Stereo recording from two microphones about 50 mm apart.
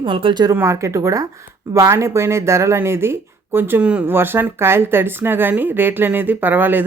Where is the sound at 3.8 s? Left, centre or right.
Right.